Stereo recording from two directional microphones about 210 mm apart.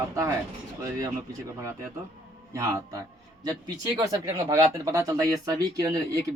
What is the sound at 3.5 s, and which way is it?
Speech, 20° right (ahead or behind).